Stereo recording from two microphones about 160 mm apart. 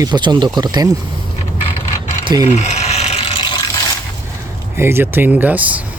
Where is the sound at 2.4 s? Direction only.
45° left (ahead or behind).